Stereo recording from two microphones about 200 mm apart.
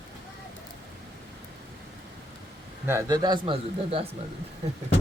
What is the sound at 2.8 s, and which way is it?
A man's voice, 15° right (ahead or behind).